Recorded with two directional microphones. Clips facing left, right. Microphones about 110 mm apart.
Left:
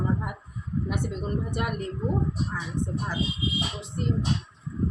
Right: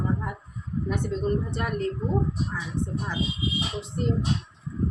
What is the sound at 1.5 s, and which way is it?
Speech, 15° left (ahead or behind).